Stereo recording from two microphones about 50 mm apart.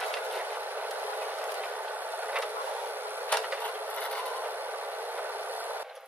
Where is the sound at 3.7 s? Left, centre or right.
Right.